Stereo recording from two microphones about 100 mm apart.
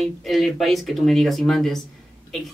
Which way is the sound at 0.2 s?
Centre (ahead or behind).